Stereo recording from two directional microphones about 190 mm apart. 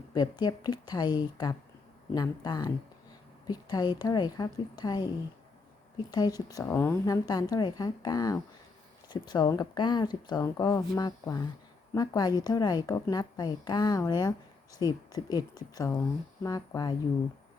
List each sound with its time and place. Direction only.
0.1 s a woman's voice: 20° left (ahead or behind)